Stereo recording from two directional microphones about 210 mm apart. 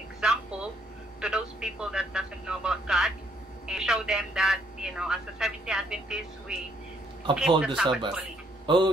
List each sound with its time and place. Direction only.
0.2 s a sound: 5° right (ahead or behind)
1.2 s speech: 5° right (ahead or behind)
8.6 s speech: 20° right (ahead or behind)